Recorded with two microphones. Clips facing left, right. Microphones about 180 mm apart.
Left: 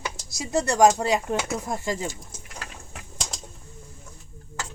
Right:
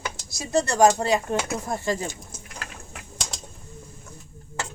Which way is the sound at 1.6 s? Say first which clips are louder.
Right 2 dB; 20° left (ahead or behind).